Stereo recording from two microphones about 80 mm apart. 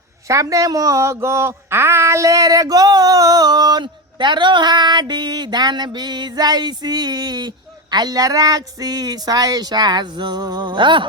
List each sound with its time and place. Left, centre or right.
0.3 s speech: right